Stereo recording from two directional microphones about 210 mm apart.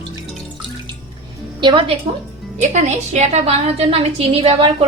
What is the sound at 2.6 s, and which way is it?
A woman's voice, 35° right (ahead or behind).